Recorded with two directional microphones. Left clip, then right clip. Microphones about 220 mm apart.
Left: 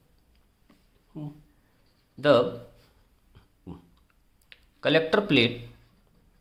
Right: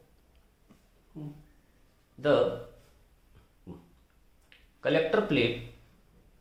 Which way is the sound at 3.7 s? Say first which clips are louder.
Left 3 dB; 50° left (ahead or behind).